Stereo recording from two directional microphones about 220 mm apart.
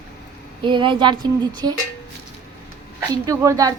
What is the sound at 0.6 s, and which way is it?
Speech, 20° right (ahead or behind).